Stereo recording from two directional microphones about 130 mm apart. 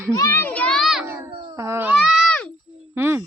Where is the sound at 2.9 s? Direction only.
20° right (ahead or behind).